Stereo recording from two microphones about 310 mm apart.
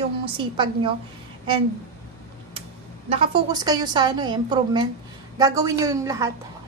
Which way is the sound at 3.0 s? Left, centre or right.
Centre.